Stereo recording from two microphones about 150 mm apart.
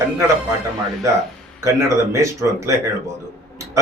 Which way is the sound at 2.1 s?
20° right (ahead or behind).